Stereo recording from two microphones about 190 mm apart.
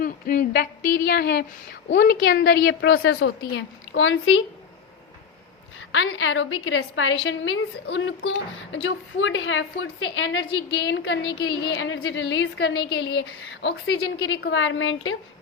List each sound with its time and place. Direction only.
0.0 s a sound: 50° left (ahead or behind)
2.6 s a woman's voice: 65° left (ahead or behind); by 4.4 s 90° left
5.9 s a woman's voice: 90° left